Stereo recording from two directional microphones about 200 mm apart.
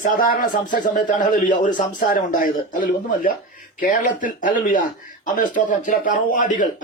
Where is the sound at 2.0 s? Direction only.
45° left (ahead or behind).